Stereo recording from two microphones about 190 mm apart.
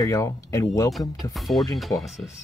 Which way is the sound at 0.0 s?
15° left (ahead or behind).